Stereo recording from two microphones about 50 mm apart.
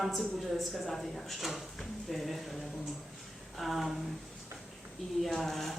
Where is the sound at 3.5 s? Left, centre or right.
Centre.